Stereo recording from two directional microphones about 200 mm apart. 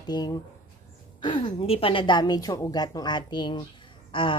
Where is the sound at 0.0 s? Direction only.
20° left (ahead or behind).